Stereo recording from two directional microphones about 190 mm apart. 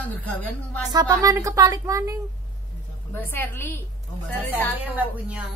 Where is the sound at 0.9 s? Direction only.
20° right (ahead or behind).